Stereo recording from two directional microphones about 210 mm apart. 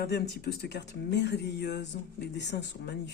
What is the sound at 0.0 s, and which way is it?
Speech, 50° left (ahead or behind).